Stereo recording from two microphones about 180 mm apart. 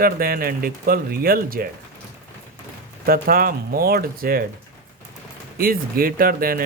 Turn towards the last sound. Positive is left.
turn(degrees=-55)  # may be behind; listen again after turning